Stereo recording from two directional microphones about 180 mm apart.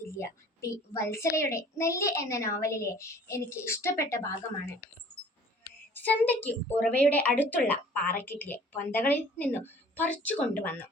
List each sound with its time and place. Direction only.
0.1 s a child's voice: 15° left (ahead or behind)
5.9 s a child's voice: 10° left (ahead or behind)